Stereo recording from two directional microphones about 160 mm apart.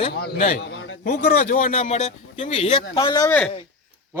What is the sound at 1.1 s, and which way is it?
A man's voice, 70° left (ahead or behind).